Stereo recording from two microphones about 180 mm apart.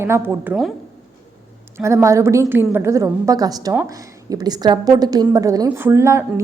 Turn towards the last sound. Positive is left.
turn(degrees=-15)  # may be behind; listen again after turning